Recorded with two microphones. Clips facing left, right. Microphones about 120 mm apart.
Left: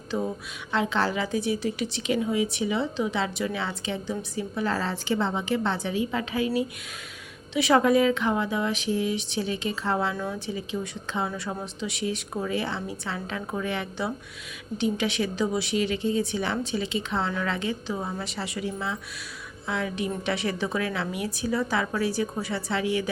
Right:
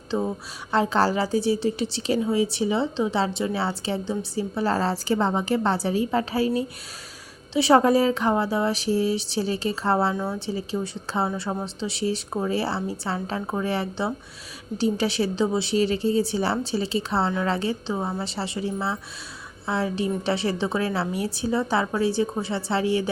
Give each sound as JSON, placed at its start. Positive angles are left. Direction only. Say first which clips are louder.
{"t": 0.1, "sound": "speech", "louder": "right 3 dB", "side_deg": -25}
{"t": 0.7, "sound": "a woman's voice", "louder": "right 4 dB", "side_deg": -40}